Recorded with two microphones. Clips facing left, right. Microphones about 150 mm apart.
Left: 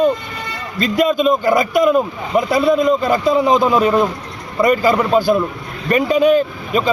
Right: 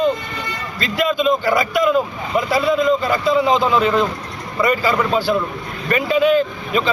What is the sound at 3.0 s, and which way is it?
Speech, 45° left (ahead or behind).